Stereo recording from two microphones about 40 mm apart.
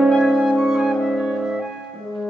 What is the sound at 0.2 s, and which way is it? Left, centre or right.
Music, centre.